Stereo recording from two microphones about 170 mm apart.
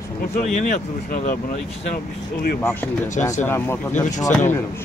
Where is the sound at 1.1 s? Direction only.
50° left (ahead or behind).